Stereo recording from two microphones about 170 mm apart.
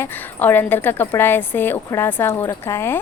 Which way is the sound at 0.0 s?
10° left (ahead or behind).